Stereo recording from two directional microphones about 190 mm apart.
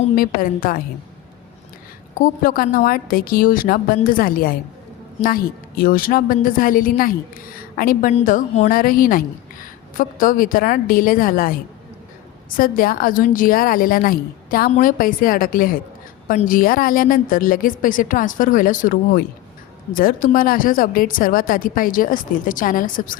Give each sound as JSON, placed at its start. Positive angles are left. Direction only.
{"t": 0.2, "sound": "a woman's voice", "side_deg": 45}
{"t": 2.1, "sound": "a woman's voice", "side_deg": 45}
{"t": 12.5, "sound": "a woman's voice", "side_deg": 50}